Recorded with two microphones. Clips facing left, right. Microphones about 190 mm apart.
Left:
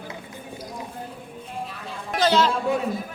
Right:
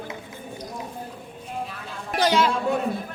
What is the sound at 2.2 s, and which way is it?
Music, 10° right (ahead or behind).